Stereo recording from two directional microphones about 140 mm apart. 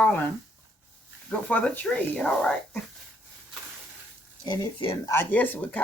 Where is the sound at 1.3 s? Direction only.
10° left (ahead or behind).